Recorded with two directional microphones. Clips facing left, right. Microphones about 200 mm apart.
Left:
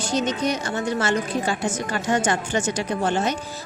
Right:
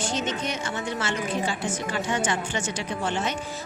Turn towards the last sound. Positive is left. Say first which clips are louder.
# left 5 dB
turn(degrees=40)  # may be behind; listen again after turning